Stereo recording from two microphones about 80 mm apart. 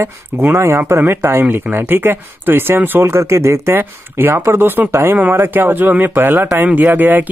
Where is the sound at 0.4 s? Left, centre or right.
Right.